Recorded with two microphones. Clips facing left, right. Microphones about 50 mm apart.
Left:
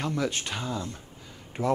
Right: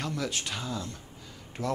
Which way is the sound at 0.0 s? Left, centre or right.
Centre.